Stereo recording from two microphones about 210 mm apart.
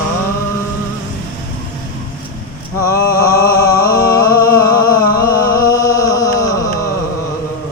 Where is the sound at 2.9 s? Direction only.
15° left (ahead or behind).